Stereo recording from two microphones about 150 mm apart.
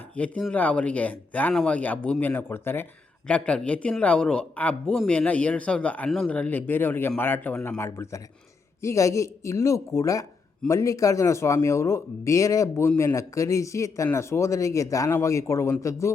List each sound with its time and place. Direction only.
0.2 s a man's voice: 10° left (ahead or behind)